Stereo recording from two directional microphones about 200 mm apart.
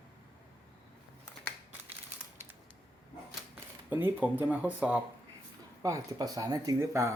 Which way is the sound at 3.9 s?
10° right (ahead or behind).